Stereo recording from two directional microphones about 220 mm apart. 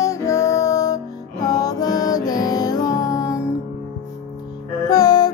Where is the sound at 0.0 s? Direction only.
15° left (ahead or behind).